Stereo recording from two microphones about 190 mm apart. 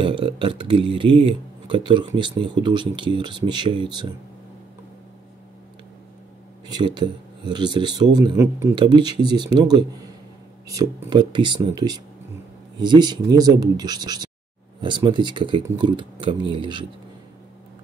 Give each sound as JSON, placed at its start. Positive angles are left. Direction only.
{"t": 0.0, "sound": "speech", "side_deg": -25}
{"t": 6.7, "sound": "speech", "side_deg": -25}